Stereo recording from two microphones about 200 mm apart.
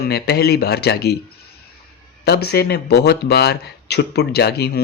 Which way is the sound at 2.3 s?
55° left (ahead or behind).